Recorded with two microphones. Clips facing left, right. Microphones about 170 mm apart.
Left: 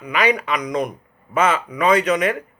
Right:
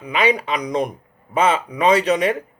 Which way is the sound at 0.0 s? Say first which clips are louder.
Right 1 dB; 25° right (ahead or behind).